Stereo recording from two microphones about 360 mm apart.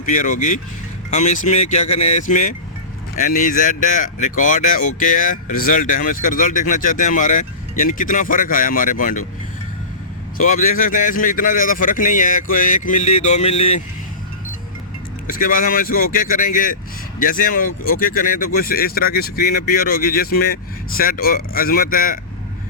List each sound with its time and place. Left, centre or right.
0.0 s speech: left
10.3 s speech: left
15.3 s speech: left
17.7 s speech: left
18.0 s speech: left